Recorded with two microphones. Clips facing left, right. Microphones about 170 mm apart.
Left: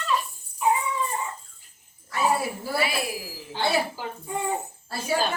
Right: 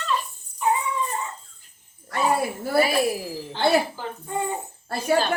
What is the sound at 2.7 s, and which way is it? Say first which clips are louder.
Speech: right 7 dB; 40° right (ahead or behind).